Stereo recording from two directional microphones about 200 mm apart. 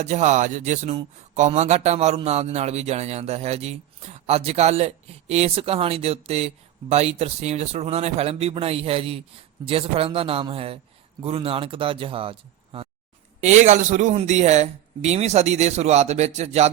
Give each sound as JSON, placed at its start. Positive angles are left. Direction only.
{"t": 0.0, "sound": "speech", "side_deg": -35}